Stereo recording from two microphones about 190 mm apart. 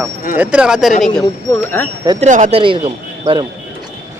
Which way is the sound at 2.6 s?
25° right (ahead or behind).